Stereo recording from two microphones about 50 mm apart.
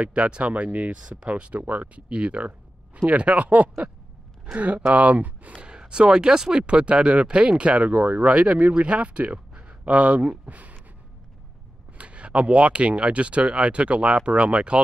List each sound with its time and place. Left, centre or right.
0.0 s speech: right
1.6 s speech: right
2.0 s speech: right
5.7 s speech: centre
12.0 s speech: right